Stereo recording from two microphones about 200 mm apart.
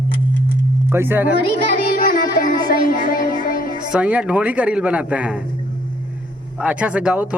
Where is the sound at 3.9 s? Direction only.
5° right (ahead or behind).